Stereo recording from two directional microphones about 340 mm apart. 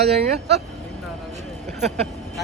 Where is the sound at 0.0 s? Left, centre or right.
Right.